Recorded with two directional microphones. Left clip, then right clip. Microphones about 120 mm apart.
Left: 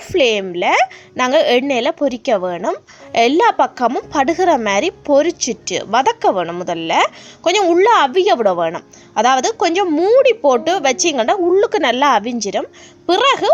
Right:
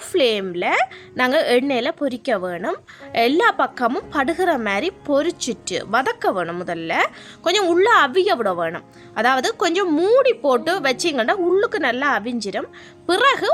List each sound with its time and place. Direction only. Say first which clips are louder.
0.1 s a woman's voice: left 4 dB; 15° left (ahead or behind)
11.5 s speech: left 5 dB; 30° left (ahead or behind)
12.2 s a woman's voice: left 5 dB; 25° left (ahead or behind)